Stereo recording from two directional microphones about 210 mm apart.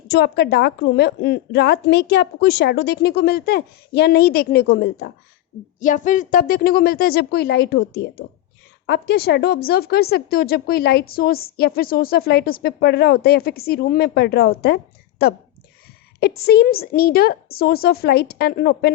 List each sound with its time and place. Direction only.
0.1 s a woman's voice: 50° left (ahead or behind)
5.8 s a woman's voice: 35° left (ahead or behind)
16.5 s a woman's voice: 50° left (ahead or behind)